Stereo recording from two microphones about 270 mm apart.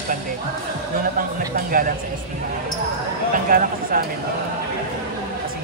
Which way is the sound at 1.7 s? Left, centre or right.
Right.